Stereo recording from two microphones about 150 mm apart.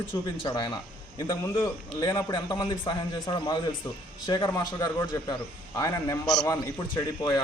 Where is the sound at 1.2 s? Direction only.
20° left (ahead or behind).